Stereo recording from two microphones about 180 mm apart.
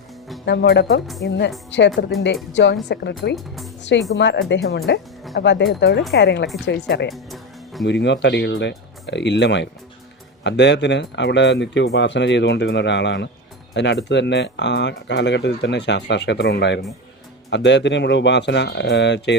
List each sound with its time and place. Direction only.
0.4 s speech: 70° left (ahead or behind)
2.9 s speech: 70° left (ahead or behind)
3.3 s speech: centre (ahead or behind)
4.2 s speech: 75° left (ahead or behind)
7.1 s music: centre (ahead or behind)
7.9 s speech: 75° left (ahead or behind)